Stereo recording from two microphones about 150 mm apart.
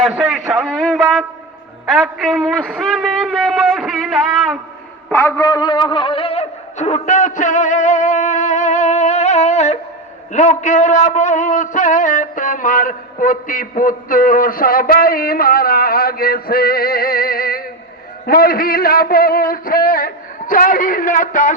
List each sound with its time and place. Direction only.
0.0 s a man's voice: centre (ahead or behind)
5.1 s a sound: 15° left (ahead or behind); by 9.7 s 50° left (ahead or behind)
10.3 s a man's voice: 55° left (ahead or behind)